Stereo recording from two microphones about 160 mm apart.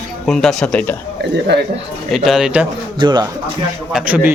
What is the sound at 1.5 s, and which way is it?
Speech, 90° right.